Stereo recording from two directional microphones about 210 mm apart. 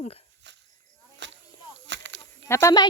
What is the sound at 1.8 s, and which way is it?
Whip, 60° right (ahead or behind).